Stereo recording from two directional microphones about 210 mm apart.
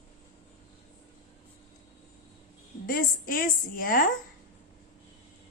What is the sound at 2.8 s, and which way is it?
A woman's voice, 40° left (ahead or behind).